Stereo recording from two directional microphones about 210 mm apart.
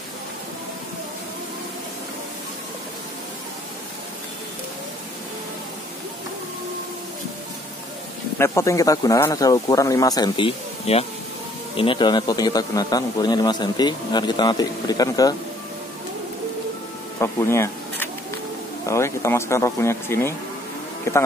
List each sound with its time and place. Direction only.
8.4 s a man's voice: 15° left (ahead or behind)
17.2 s camera: 10° left (ahead or behind)
18.9 s speech: 15° left (ahead or behind)